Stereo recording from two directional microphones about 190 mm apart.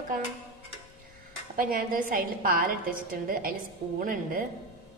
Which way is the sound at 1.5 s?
45° right (ahead or behind).